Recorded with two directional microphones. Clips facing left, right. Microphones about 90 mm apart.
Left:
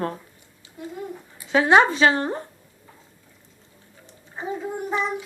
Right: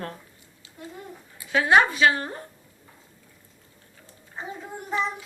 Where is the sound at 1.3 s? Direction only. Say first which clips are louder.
Left 3 dB; 25° left (ahead or behind).